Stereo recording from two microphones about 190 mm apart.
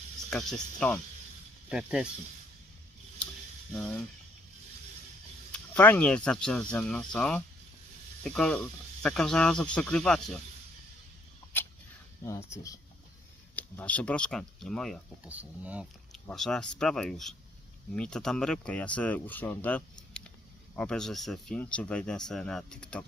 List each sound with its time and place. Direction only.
0.3 s speech: 5° left (ahead or behind)
1.7 s speech: 5° right (ahead or behind)
5.5 s speech: 10° left (ahead or behind)
12.5 s speech: 15° left (ahead or behind)
20.1 s a sound: 5° left (ahead or behind)
20.7 s speech: 5° left (ahead or behind)